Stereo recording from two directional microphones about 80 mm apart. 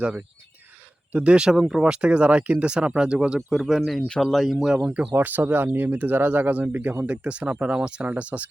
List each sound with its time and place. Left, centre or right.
1.1 s speech: centre
5.1 s speech: right
7.3 s speech: centre